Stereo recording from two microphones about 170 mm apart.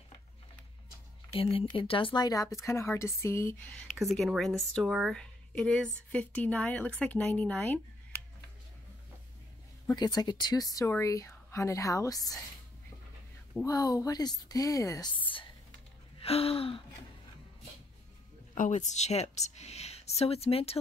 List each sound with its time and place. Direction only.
1.3 s speech: 30° left (ahead or behind); by 3.6 s 15° left (ahead or behind)
3.9 s speech: centre (ahead or behind)
9.8 s speech: 25° left (ahead or behind)
13.7 s speech: 20° left (ahead or behind)
16.2 s speech: 35° left (ahead or behind)
18.5 s speech: 45° left (ahead or behind)